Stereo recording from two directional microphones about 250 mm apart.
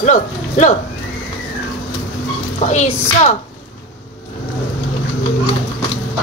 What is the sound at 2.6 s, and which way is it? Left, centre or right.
Speech, left.